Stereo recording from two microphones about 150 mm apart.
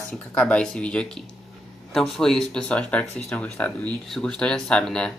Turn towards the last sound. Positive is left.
turn(degrees=5)  # may be behind; listen again after turning